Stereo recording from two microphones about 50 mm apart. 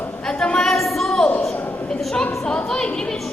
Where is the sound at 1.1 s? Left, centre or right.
Centre.